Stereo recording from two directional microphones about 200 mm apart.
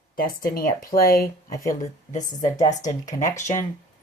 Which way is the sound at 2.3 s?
20° left (ahead or behind).